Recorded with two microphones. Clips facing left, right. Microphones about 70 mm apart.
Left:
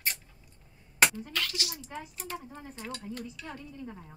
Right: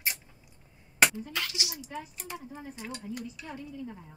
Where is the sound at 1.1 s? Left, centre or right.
Centre.